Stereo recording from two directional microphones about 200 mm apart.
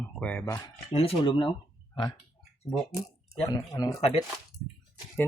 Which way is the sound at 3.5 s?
20° left (ahead or behind).